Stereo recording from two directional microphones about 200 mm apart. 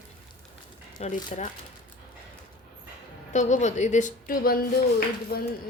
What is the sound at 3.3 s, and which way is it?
Speech, 35° left (ahead or behind).